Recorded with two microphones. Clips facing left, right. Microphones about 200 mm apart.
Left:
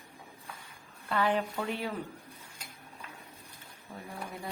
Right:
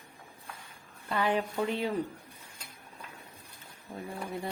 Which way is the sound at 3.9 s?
15° right (ahead or behind).